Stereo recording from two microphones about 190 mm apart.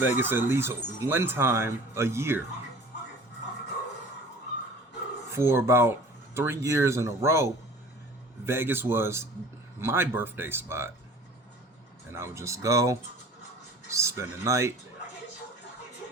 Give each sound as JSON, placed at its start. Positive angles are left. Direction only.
{"t": 0.0, "sound": "speech", "side_deg": -10}
{"t": 5.3, "sound": "speech", "side_deg": -15}
{"t": 12.1, "sound": "speech", "side_deg": -15}